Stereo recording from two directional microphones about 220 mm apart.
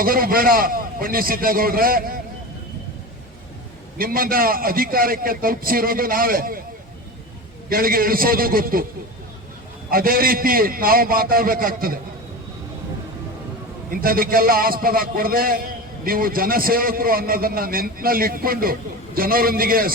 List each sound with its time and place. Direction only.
0.0 s a man's voice: 40° right (ahead or behind)
3.9 s a man's voice: 40° right (ahead or behind)
7.7 s a man's voice: 40° right (ahead or behind)
9.9 s a man's voice: 40° right (ahead or behind)
13.9 s a man's voice: 40° right (ahead or behind)